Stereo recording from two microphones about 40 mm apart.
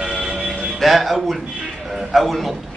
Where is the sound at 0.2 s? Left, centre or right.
Right.